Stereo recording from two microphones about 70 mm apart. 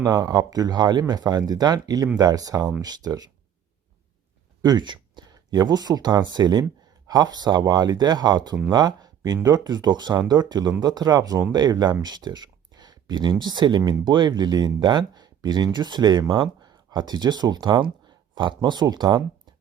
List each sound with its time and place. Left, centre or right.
0.0 s speech: right
4.6 s speech: right
6.3 s speech: right
7.1 s speech: right
8.7 s speech: right
9.6 s speech: right
12.0 s a sound: right
13.4 s speech: right